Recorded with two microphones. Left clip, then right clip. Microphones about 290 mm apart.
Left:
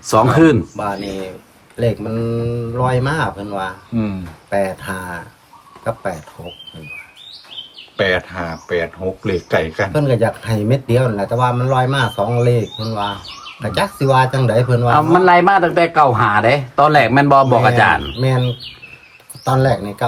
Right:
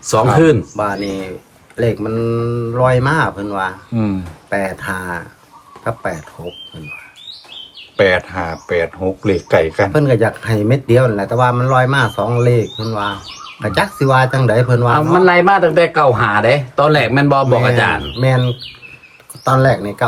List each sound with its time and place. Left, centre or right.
0.0 s speech: centre
0.8 s speech: centre
7.9 s speech: right
9.9 s speech: centre
14.9 s speech: centre
18.2 s speech: centre